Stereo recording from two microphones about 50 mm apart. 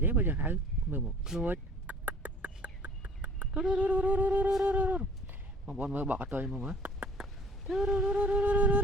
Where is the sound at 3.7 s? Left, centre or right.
Right.